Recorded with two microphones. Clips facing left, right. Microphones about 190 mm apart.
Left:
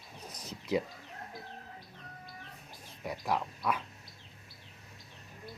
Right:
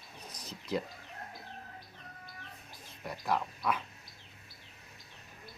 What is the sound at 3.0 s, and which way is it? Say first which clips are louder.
Speech: even; 5° left (ahead or behind).